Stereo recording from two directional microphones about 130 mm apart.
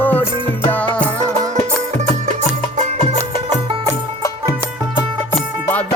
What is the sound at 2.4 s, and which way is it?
Music, 65° right (ahead or behind).